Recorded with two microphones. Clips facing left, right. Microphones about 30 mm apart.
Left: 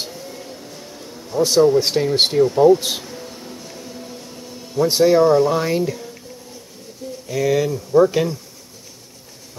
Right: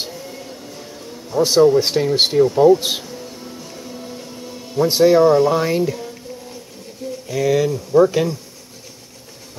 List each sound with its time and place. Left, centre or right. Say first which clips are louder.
0.0 s a sound: right 1 dB; centre
3.7 s music: right 2 dB; centre
4.8 s speech: right 1 dB; centre
7.2 s speech: right 1 dB; centre